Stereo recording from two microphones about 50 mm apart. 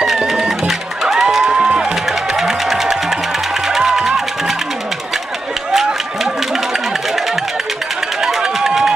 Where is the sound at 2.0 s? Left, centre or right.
Centre.